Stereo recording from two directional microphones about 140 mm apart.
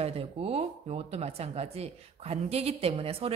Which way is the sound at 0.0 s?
45° right (ahead or behind).